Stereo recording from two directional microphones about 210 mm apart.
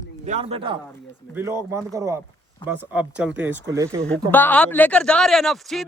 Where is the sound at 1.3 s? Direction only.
10° right (ahead or behind).